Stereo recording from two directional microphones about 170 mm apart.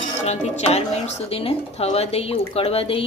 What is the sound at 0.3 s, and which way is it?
A woman's voice, 40° left (ahead or behind).